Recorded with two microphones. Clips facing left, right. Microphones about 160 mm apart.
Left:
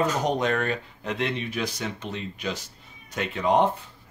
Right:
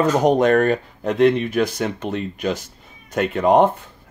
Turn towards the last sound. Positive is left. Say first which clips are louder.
# right 7 dB
turn(degrees=-50)  # may be behind; listen again after turning